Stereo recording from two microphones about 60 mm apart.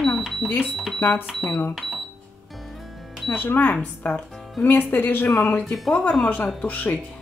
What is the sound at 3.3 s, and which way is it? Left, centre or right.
A woman's voice, left.